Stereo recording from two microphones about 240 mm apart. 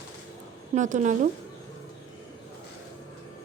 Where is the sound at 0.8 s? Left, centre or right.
Right.